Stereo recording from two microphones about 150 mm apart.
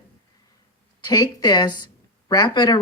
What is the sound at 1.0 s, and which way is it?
Speech, 25° left (ahead or behind).